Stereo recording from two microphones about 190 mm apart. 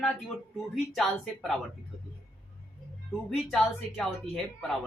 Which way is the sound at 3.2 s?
Centre (ahead or behind).